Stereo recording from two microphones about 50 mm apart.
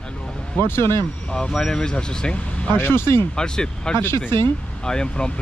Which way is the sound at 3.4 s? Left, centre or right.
Centre.